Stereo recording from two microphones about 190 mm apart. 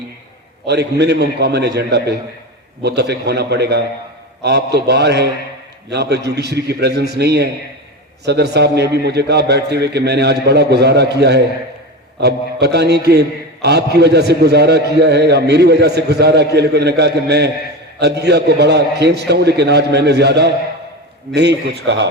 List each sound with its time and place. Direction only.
0.7 s a man's voice: 65° right (ahead or behind)